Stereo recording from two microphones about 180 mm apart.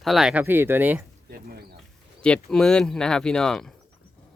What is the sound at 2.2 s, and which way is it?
Speech, 5° left (ahead or behind).